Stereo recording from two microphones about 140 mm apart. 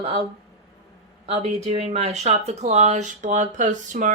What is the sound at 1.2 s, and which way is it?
Speech, 50° right (ahead or behind).